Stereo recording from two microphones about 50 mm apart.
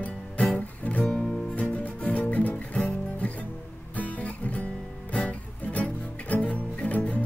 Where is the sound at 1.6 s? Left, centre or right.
Left.